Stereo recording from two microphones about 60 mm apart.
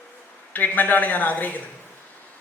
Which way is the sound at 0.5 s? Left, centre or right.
Left.